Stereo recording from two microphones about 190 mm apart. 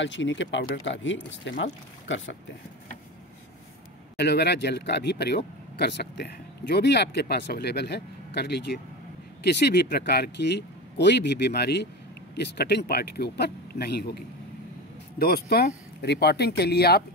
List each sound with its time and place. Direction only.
0.0 s speech: 75° left (ahead or behind)
4.2 s speech: 60° left (ahead or behind)
15.1 s speech: 55° left (ahead or behind)